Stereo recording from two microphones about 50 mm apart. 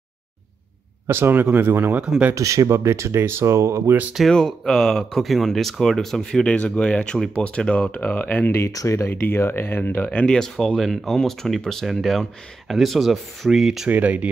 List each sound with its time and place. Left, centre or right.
1.0 s speech: right
1.3 s speech: right
1.6 s speech: right
1.9 s speech: right
2.3 s speech: right
4.3 s speech: centre
6.4 s speech: left
8.5 s speech: left
9.1 s speech: left
10.0 s speech: left; by 13.8 s centre
13.8 s speech: right